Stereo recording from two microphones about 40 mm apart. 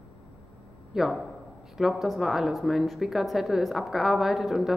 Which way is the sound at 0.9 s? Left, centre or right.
Centre.